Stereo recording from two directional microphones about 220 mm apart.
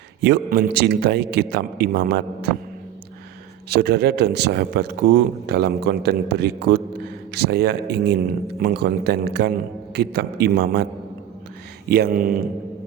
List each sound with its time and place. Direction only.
0.2 s speech: 45° right (ahead or behind)
3.7 s speech: 45° right (ahead or behind)
11.9 s speech: 45° right (ahead or behind)